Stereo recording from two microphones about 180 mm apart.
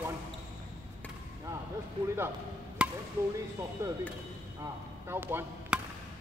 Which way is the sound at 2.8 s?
5° right (ahead or behind).